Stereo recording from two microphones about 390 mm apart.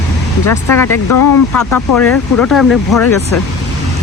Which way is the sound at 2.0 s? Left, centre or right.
Centre.